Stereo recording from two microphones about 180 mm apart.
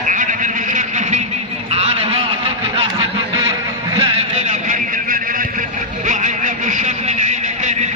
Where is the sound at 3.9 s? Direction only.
30° right (ahead or behind).